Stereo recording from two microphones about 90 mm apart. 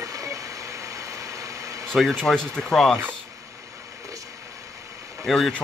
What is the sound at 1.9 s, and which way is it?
Speech, 5° left (ahead or behind).